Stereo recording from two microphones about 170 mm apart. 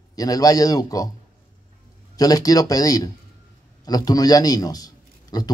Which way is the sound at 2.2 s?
20° left (ahead or behind).